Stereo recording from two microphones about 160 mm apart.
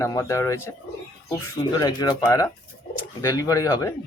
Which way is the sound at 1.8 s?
25° left (ahead or behind).